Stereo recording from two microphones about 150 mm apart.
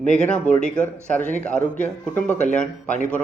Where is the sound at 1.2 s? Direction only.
50° left (ahead or behind).